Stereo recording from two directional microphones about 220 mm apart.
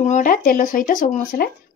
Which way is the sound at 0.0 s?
35° left (ahead or behind).